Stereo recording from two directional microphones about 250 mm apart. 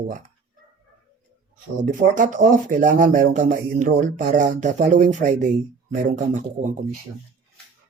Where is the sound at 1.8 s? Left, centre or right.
Right.